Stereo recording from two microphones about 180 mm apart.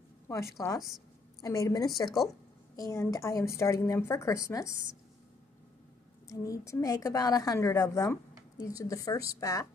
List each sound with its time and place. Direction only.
0.3 s a woman's voice: 15° left (ahead or behind)
6.2 s a woman's voice: 20° left (ahead or behind)